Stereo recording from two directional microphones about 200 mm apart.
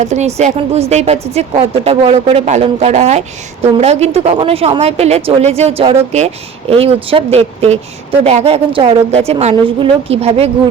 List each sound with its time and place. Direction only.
0.0 s speech: 35° right (ahead or behind)